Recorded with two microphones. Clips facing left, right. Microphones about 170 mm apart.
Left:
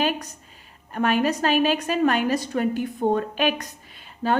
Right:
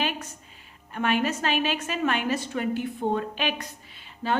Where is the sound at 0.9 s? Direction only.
40° left (ahead or behind).